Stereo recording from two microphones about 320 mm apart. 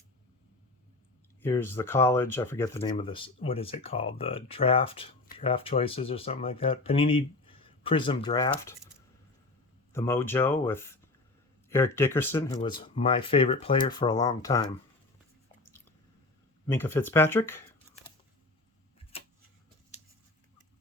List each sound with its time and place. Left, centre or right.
1.4 s speech: centre
9.9 s speech: centre
16.6 s speech: centre